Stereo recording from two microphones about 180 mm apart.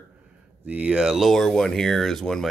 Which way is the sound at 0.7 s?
5° right (ahead or behind).